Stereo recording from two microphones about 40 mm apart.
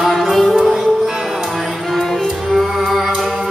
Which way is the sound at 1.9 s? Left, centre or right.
Centre.